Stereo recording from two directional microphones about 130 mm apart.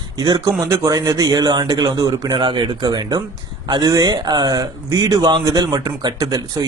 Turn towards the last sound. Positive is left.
turn(degrees=-30)  # may be behind; listen again after turning